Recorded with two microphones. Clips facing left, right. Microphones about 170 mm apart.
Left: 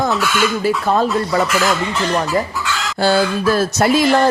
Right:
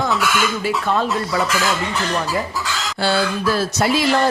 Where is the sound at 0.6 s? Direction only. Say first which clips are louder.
Left 4 dB; 40° left (ahead or behind).